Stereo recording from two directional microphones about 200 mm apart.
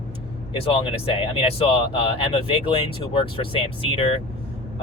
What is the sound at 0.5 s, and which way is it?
Speech, 25° left (ahead or behind).